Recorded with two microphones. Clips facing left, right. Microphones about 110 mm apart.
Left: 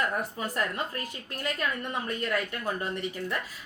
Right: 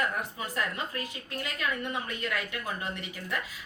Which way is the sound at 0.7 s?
45° left (ahead or behind).